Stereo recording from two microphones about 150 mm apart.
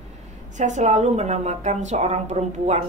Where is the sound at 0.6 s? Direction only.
55° right (ahead or behind).